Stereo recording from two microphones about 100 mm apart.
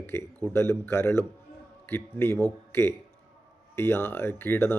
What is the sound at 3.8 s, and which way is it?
Speech, 25° left (ahead or behind).